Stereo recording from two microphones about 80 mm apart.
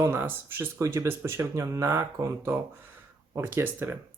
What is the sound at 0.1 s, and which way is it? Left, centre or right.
Speech, right.